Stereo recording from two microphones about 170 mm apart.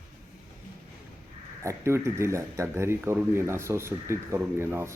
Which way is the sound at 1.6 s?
15° right (ahead or behind).